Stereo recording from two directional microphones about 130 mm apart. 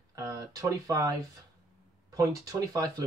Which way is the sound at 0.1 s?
25° right (ahead or behind).